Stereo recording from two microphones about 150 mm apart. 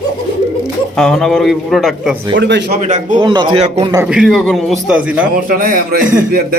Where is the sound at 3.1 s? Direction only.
30° right (ahead or behind).